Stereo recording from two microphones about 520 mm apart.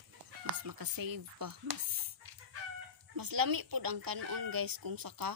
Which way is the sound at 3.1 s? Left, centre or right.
Right.